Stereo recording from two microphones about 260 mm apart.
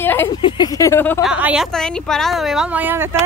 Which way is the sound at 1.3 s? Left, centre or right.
Centre.